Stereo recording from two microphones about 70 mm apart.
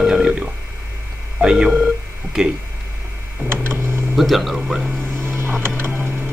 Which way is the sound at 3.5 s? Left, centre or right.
Right.